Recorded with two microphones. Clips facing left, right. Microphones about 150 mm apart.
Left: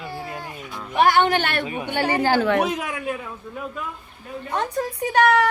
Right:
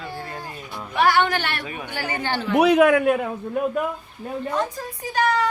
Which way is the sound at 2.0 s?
35° left (ahead or behind).